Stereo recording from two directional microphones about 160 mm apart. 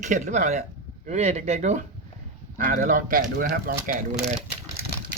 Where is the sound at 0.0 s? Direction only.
50° right (ahead or behind).